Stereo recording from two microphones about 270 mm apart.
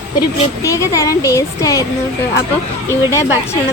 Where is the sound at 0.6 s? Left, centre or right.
Centre.